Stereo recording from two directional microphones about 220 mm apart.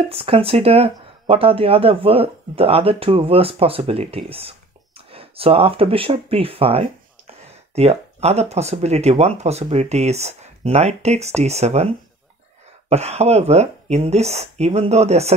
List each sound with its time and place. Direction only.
0.1 s speech: 25° right (ahead or behind)
12.9 s speech: 30° right (ahead or behind)